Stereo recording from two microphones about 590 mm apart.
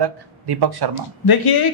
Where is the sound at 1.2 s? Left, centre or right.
Left.